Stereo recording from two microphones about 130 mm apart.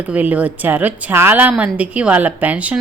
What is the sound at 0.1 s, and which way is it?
A woman's voice, 10° right (ahead or behind).